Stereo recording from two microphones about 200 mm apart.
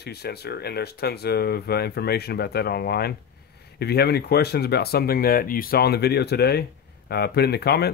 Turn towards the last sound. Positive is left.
turn(degrees=55)  # may be behind; listen again after turning